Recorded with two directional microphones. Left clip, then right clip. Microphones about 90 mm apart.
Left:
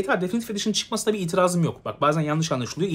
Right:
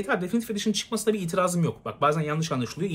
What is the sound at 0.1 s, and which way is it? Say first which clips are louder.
Speech: left 2 dB; 30° left (ahead or behind).